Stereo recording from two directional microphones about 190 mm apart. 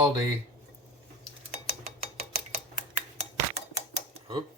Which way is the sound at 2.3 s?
50° right (ahead or behind).